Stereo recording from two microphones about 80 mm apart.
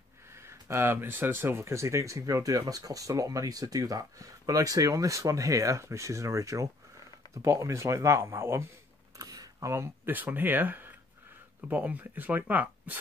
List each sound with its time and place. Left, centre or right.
0.3 s speech: right
9.1 s a sound: right
9.7 s speech: right
10.1 s speech: right